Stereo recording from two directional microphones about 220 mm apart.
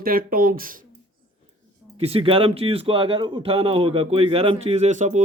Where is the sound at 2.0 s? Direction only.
25° right (ahead or behind).